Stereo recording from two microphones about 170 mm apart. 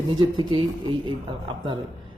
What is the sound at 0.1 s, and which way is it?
Speech, 25° right (ahead or behind).